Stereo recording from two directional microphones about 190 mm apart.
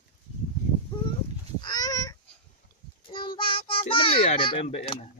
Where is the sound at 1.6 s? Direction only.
20° left (ahead or behind).